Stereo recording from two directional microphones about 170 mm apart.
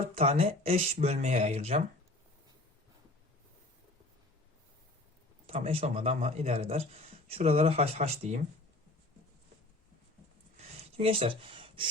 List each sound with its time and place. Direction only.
0.1 s speech: 35° right (ahead or behind)
5.5 s speech: 35° right (ahead or behind)
10.6 s a sound: 35° right (ahead or behind)